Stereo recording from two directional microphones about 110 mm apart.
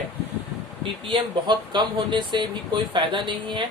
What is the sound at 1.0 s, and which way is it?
Speech, 45° right (ahead or behind).